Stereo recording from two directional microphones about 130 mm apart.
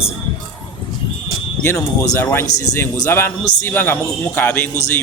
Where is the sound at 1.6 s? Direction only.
20° left (ahead or behind).